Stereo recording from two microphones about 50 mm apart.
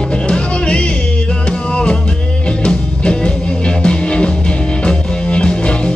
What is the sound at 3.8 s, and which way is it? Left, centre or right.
Music, centre.